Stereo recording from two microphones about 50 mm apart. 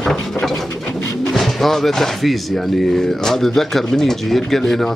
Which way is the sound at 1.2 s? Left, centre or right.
Centre.